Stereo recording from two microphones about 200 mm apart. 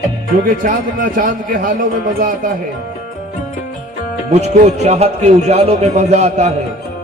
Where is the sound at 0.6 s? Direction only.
40° right (ahead or behind).